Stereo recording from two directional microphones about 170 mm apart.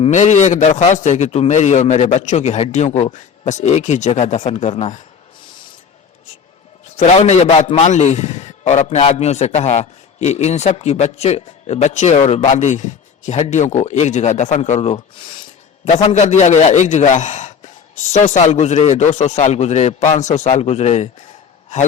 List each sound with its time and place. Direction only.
0.0 s a man's voice: 45° left (ahead or behind)
6.9 s a man's voice: 45° left (ahead or behind)